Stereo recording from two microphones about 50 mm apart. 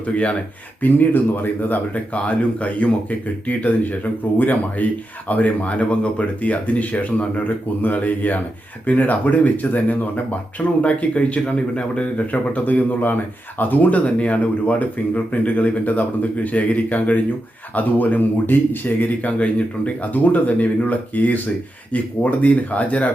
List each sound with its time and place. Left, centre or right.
0.8 s speech: left
2.1 s a man's voice: left
12.1 s speech: left